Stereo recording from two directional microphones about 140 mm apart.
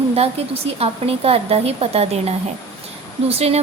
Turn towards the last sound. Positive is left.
turn(degrees=-45)  # may be behind; listen again after turning